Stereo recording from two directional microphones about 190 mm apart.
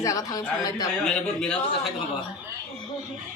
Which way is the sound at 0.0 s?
15° left (ahead or behind).